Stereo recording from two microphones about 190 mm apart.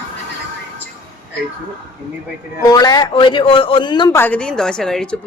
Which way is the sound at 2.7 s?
20° left (ahead or behind).